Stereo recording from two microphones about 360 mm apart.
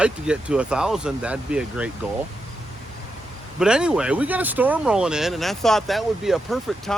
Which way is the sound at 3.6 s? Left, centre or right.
Centre.